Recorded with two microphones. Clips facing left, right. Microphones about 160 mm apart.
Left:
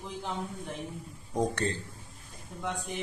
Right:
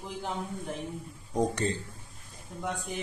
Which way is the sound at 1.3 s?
20° right (ahead or behind).